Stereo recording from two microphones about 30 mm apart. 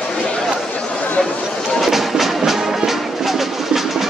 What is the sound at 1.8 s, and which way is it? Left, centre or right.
Music, centre.